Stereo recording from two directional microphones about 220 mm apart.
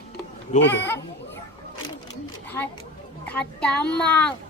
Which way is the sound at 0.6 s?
50° left (ahead or behind).